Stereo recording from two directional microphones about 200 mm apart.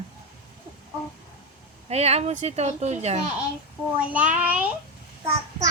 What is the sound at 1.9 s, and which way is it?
Speech, 30° right (ahead or behind).